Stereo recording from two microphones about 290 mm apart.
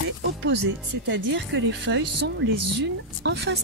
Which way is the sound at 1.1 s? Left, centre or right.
Right.